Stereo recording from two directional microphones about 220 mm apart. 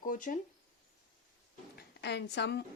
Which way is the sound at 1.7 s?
50° left (ahead or behind).